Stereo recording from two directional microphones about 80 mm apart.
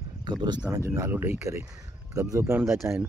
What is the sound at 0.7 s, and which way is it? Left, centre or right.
Speech, right.